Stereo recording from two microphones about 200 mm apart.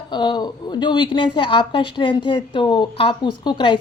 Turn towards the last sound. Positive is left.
turn(degrees=20)  # may be behind; listen again after turning